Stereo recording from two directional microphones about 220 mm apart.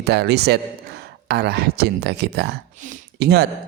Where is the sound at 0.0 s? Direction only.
50° right (ahead or behind).